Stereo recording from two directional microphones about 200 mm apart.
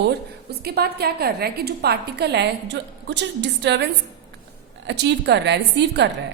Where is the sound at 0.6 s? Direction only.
50° right (ahead or behind).